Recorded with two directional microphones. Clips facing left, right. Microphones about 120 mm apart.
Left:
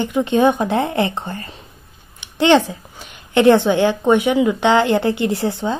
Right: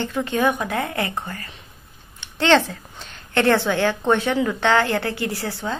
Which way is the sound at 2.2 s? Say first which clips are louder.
Left 4 dB; 15° left (ahead or behind).